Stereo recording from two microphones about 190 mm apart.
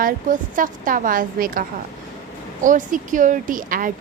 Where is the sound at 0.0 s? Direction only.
45° right (ahead or behind).